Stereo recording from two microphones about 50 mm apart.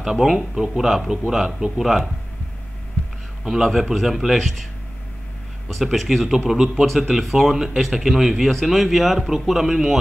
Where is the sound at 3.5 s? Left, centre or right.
Centre.